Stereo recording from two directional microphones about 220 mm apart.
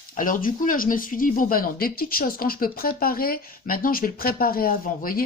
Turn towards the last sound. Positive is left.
turn(degrees=40)  # may be behind; listen again after turning